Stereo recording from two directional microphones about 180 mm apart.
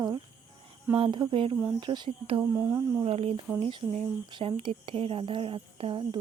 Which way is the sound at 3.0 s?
30° right (ahead or behind).